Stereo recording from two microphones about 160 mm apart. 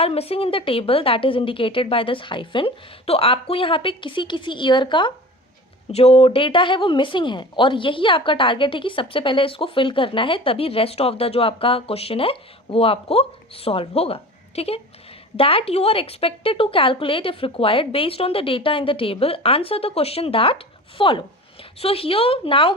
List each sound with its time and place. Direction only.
0.0 s speech: 40° left (ahead or behind)